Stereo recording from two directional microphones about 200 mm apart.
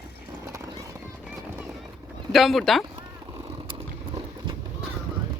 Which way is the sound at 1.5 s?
10° right (ahead or behind).